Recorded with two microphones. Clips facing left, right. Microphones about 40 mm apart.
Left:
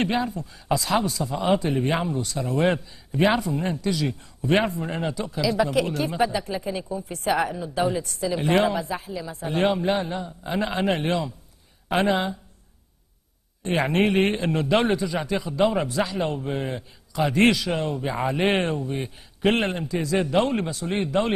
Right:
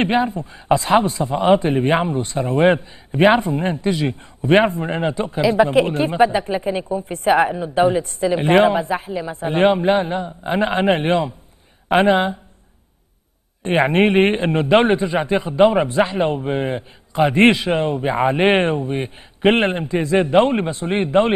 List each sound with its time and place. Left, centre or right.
0.0 s a man's voice: right
13.6 s a man's voice: right